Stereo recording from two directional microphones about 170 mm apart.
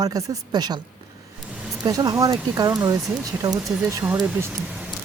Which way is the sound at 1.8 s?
20° right (ahead or behind).